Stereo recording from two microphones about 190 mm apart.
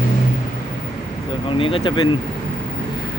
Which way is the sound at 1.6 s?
30° left (ahead or behind).